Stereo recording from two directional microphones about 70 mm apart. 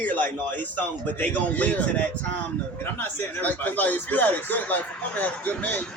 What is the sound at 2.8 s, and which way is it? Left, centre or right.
Speech, left.